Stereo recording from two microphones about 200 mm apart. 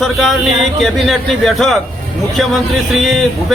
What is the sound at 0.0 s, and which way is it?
A man's voice, centre (ahead or behind).